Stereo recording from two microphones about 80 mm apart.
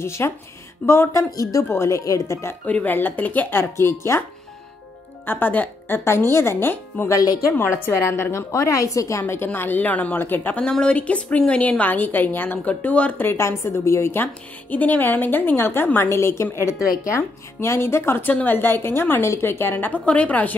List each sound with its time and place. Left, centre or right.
0.0 s a woman's voice: left
1.3 s a woman's voice: left
2.6 s a woman's voice: left
5.2 s a woman's voice: left
9.2 s a woman's voice: left